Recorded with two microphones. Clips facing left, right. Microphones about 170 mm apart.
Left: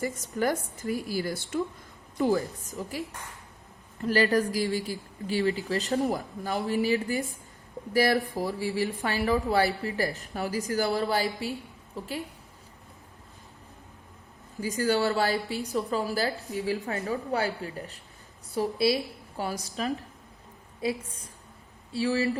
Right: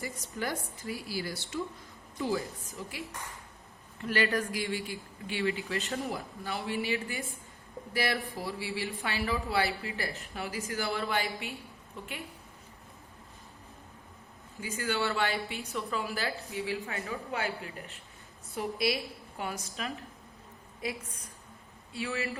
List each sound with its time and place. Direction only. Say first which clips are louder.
0.0 s a woman's voice: left 8 dB; 45° left (ahead or behind)
4.0 s a woman's voice: left 6 dB; 35° left (ahead or behind)
14.6 s a woman's voice: left 7 dB; 40° left (ahead or behind)
21.9 s a woman's voice: left 8 dB; 35° left (ahead or behind)